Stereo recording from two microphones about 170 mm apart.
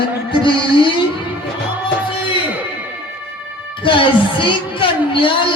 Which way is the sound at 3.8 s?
30° left (ahead or behind).